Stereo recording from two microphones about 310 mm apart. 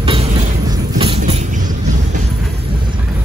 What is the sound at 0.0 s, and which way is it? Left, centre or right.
Music, centre.